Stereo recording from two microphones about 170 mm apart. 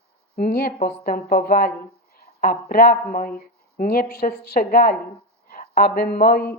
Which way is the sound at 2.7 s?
60° left (ahead or behind).